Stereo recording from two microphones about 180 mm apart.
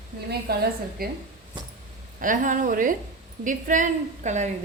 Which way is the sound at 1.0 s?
55° right (ahead or behind).